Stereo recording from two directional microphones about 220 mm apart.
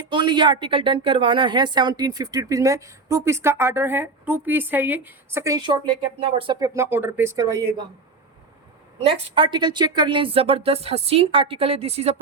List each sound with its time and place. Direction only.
0.1 s a woman's voice: 20° right (ahead or behind)
9.0 s speech: 20° right (ahead or behind)